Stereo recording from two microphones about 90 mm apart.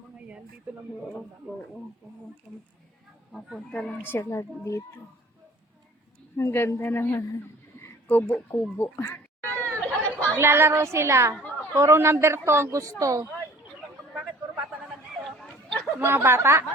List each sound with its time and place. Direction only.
0.7 s speech: 15° right (ahead or behind)
2.5 s speech: 5° right (ahead or behind)
3.3 s speech: 5° left (ahead or behind)
4.0 s speech: 25° left (ahead or behind)
6.3 s speech: 30° left (ahead or behind)
9.8 s chatter: 15° left (ahead or behind)
10.3 s a woman's voice: 30° right (ahead or behind)
15.4 s chatter: 10° left (ahead or behind)
16.0 s a woman's voice: 25° right (ahead or behind)